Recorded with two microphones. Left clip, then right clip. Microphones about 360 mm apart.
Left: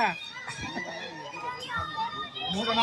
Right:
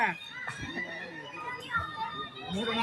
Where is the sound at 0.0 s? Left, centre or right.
Centre.